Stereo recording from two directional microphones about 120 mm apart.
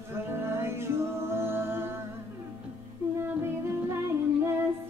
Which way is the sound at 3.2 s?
20° right (ahead or behind).